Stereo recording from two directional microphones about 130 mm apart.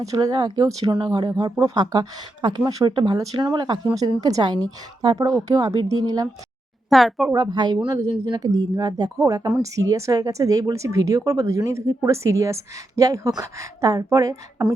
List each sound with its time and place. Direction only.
0.0 s speech: 30° right (ahead or behind)
6.9 s speech: centre (ahead or behind)
7.3 s speech: 30° right (ahead or behind)